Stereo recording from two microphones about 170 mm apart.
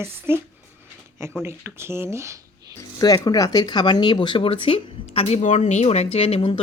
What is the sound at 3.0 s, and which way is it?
Speech, 20° left (ahead or behind).